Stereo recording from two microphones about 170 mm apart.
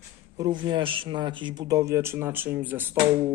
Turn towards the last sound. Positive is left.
turn(degrees=-10)  # may be behind; listen again after turning